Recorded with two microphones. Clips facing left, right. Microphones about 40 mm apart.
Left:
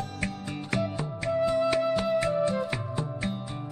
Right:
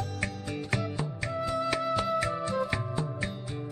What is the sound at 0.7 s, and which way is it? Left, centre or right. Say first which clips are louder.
Music: left 4 dB; centre.